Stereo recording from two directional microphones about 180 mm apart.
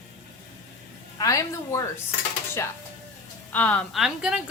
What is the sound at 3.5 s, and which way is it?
Speech, 5° left (ahead or behind).